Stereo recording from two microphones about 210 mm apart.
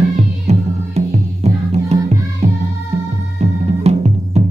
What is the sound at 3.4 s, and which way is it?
Music, 30° right (ahead or behind).